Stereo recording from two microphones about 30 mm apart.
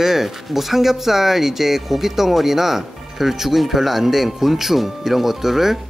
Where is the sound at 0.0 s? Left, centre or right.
Centre.